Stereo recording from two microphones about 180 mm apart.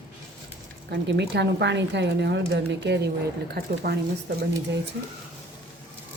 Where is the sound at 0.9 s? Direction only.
70° right (ahead or behind).